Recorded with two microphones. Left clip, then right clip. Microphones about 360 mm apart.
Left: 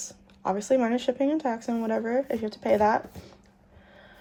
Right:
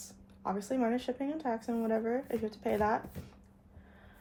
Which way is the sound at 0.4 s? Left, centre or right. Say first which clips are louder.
Left 9 dB; left.